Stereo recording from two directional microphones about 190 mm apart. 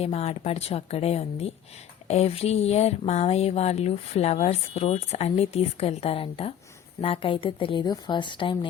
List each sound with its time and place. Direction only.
0.0 s speech: 35° left (ahead or behind)